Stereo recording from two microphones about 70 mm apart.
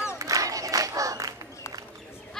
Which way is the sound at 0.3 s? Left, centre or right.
Right.